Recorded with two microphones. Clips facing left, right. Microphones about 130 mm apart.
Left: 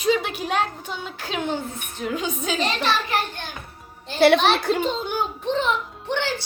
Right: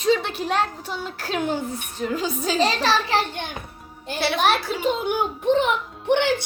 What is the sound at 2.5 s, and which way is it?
Speech, 35° right (ahead or behind).